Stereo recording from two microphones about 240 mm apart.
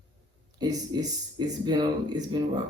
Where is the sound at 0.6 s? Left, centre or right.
Centre.